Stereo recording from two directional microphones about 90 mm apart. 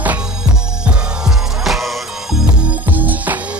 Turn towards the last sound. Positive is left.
turn(degrees=-20)  # may be behind; listen again after turning